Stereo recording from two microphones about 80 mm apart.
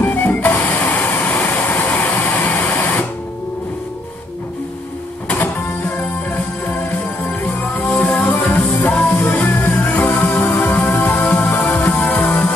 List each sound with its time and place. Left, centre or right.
0.0 s music: left
5.3 s music: left